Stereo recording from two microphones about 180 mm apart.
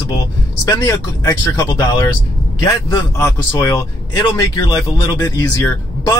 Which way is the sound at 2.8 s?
20° left (ahead or behind).